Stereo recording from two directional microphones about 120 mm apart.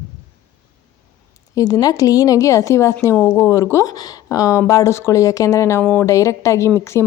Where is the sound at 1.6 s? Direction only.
30° left (ahead or behind).